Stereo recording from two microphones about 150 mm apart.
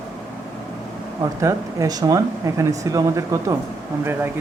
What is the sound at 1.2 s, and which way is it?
Speech, 20° right (ahead or behind).